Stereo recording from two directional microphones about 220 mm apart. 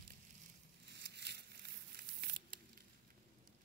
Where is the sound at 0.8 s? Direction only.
50° right (ahead or behind).